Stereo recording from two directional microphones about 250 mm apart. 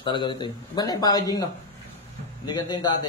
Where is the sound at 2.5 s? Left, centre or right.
Centre.